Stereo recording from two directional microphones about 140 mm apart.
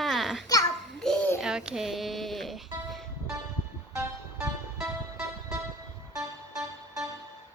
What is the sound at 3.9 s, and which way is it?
Music, 20° right (ahead or behind).